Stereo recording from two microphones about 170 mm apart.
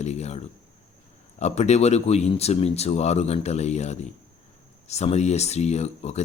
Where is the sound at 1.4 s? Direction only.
40° left (ahead or behind).